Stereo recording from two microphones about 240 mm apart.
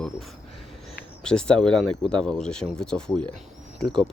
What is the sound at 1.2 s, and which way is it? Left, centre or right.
Speech, centre.